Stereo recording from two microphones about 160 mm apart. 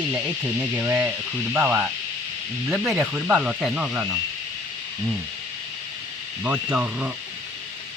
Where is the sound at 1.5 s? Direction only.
10° right (ahead or behind).